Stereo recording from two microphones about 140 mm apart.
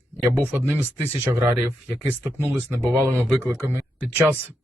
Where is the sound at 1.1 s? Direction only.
20° right (ahead or behind).